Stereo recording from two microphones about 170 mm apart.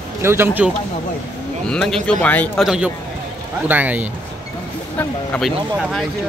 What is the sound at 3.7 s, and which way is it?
Speech, 10° right (ahead or behind).